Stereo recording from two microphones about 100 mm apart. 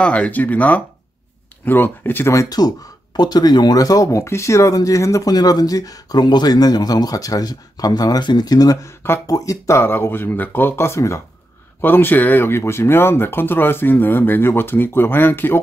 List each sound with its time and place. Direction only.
0.0 s speech: 10° left (ahead or behind)
3.2 s speech: 45° left (ahead or behind); by 15.6 s 20° left (ahead or behind)